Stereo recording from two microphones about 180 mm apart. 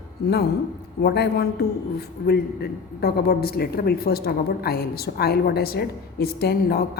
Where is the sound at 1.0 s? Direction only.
65° left (ahead or behind).